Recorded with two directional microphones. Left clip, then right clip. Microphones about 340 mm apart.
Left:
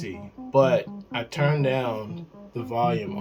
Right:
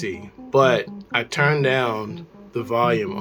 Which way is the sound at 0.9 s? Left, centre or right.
Right.